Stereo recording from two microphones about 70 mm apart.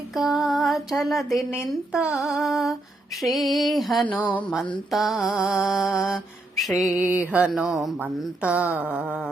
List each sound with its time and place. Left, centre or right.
0.2 s mantra: centre
1.9 s female singing: centre
2.1 s mantra: centre
6.9 s speech: right
7.5 s mantra: centre
8.0 s speech: centre